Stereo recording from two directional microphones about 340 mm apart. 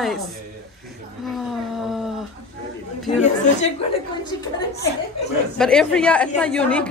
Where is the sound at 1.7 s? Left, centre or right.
Centre.